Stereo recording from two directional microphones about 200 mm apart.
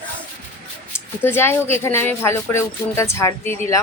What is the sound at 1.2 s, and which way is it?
Speech, 10° left (ahead or behind).